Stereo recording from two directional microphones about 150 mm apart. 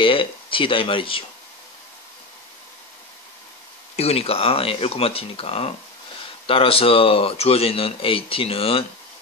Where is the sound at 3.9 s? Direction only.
40° left (ahead or behind).